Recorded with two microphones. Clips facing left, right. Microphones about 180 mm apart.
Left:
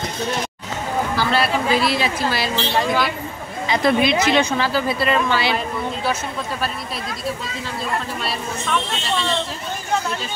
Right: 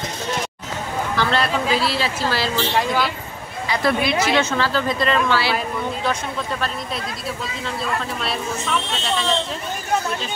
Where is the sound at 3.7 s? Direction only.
20° left (ahead or behind).